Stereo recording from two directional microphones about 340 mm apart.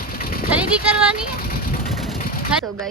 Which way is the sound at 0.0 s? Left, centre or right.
Left.